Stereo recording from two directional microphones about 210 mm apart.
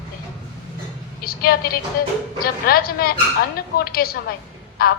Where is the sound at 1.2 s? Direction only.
45° left (ahead or behind).